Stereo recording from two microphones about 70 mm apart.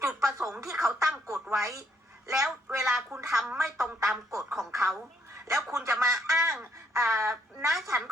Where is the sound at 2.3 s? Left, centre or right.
Centre.